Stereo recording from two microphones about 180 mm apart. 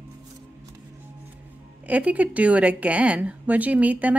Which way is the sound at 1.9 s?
10° right (ahead or behind).